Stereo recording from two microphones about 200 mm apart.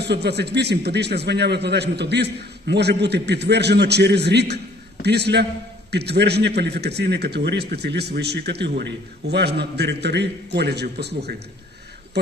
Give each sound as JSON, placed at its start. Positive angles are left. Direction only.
{"t": 0.0, "sound": "a man's voice", "side_deg": -55}